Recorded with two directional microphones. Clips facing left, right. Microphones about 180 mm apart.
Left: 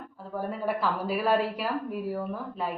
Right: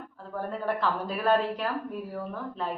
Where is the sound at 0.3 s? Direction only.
10° left (ahead or behind).